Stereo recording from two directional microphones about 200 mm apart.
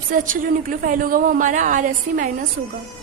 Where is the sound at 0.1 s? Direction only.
40° right (ahead or behind).